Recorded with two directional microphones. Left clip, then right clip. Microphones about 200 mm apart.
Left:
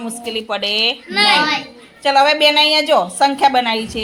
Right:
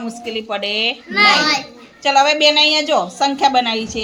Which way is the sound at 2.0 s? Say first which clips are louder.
Left 1 dB; 5° left (ahead or behind).